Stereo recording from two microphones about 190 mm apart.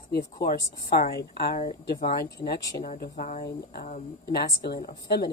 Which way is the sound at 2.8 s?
55° left (ahead or behind).